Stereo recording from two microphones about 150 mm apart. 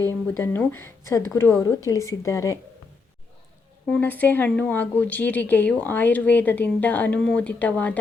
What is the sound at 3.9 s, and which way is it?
Speech, 10° left (ahead or behind).